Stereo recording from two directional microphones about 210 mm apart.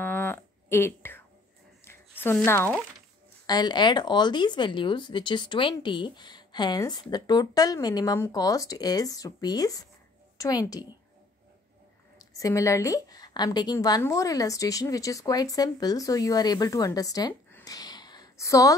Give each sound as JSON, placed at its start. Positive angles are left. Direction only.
{"t": 0.0, "sound": "a sound", "side_deg": 10}
{"t": 1.9, "sound": "a woman's voice", "side_deg": 10}
{"t": 12.2, "sound": "a woman's voice", "side_deg": 15}